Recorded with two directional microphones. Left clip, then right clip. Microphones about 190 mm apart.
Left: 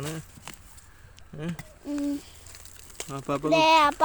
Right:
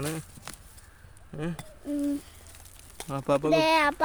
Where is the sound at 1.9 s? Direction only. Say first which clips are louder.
Even; centre (ahead or behind).